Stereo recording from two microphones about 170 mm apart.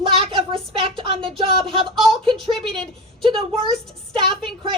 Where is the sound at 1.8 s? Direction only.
Centre (ahead or behind).